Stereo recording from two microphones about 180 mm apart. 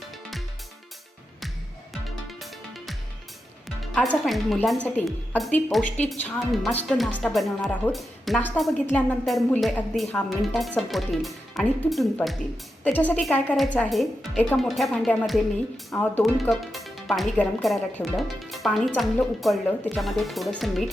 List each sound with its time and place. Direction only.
1.9 s music: centre (ahead or behind)
3.9 s a woman's voice: centre (ahead or behind)